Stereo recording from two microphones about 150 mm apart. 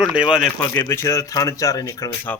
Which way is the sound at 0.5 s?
20° left (ahead or behind).